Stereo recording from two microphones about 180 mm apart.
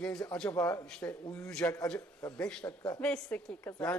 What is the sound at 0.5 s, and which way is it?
Speech, 15° left (ahead or behind).